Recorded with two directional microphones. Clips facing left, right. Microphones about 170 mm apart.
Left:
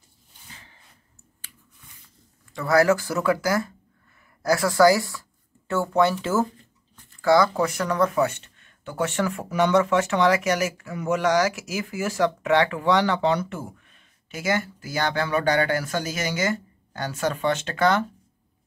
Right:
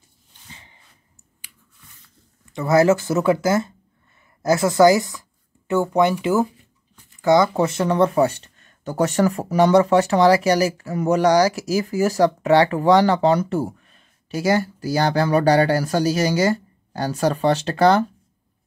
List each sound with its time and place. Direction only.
1.4 s finger snapping: 15° right (ahead or behind)
2.5 s speech: 20° right (ahead or behind)